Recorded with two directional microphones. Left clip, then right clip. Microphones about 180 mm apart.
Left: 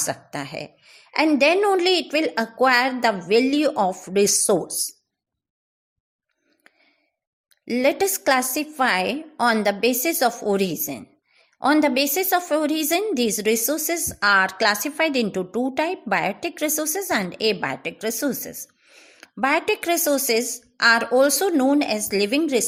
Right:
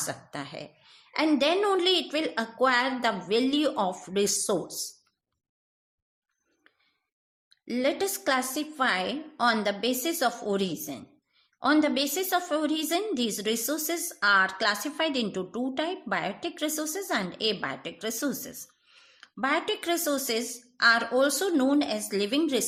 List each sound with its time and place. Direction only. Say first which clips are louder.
0.0 s a woman's voice: left 7 dB; 35° left (ahead or behind)
7.6 s a woman's voice: left 7 dB; 35° left (ahead or behind)